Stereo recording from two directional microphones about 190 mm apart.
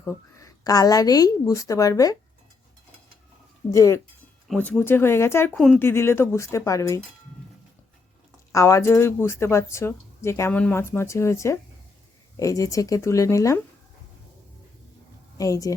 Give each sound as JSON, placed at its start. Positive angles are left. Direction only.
{"t": 0.0, "sound": "speech", "side_deg": 15}
{"t": 3.7, "sound": "speech", "side_deg": 15}
{"t": 4.4, "sound": "speech", "side_deg": 5}
{"t": 8.5, "sound": "speech", "side_deg": 15}
{"t": 15.4, "sound": "speech", "side_deg": 15}